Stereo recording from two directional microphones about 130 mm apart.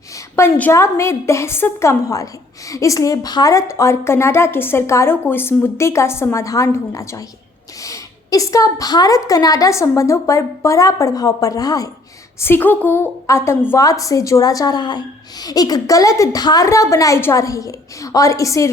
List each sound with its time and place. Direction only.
0.3 s a woman's voice: 20° left (ahead or behind)
12.4 s a woman's voice: 15° left (ahead or behind)